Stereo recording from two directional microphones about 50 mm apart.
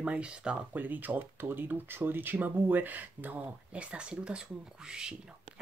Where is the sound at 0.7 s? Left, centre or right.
Right; by 5.1 s centre.